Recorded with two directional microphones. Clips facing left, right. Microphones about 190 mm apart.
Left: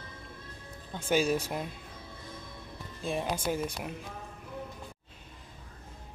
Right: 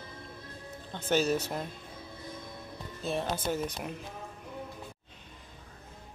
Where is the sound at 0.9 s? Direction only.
10° left (ahead or behind).